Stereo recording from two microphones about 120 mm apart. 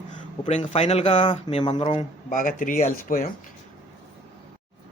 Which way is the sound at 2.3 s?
90° left.